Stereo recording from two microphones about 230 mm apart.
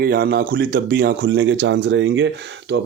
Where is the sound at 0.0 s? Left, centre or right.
Right.